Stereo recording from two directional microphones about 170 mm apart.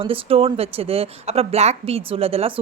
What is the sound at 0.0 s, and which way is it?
Speech, 35° right (ahead or behind).